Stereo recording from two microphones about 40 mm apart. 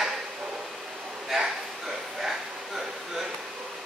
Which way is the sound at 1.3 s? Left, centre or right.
Centre.